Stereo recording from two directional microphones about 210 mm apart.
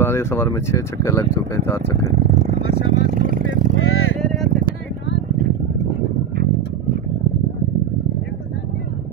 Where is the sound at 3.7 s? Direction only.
70° left (ahead or behind).